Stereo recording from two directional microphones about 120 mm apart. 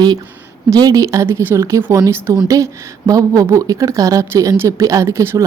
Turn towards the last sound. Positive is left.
turn(degrees=-20)  # may be behind; listen again after turning